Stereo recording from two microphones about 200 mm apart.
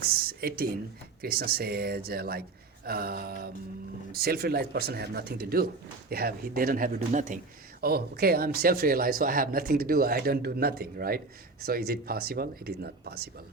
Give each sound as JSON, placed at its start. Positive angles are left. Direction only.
{"t": 0.0, "sound": "speech", "side_deg": -50}
{"t": 7.8, "sound": "speech", "side_deg": -50}